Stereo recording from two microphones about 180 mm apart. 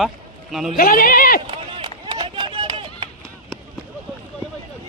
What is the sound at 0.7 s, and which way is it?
Speech, 55° left (ahead or behind).